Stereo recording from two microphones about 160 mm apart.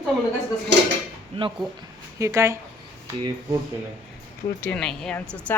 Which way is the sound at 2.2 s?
20° right (ahead or behind).